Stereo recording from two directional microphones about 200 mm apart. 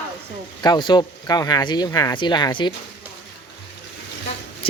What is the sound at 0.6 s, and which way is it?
Speech, 20° left (ahead or behind).